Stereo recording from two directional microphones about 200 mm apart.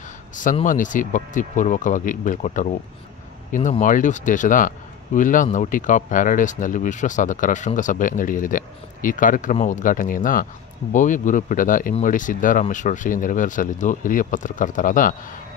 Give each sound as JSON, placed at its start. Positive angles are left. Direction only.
{"t": 0.4, "sound": "speech", "side_deg": 40}
{"t": 3.8, "sound": "speech", "side_deg": 40}